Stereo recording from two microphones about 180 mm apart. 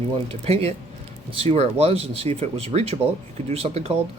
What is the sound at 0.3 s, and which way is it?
Speech, 35° right (ahead or behind).